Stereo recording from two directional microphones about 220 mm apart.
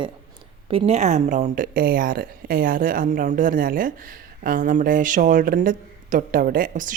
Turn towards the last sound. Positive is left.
turn(degrees=-35)  # may be behind; listen again after turning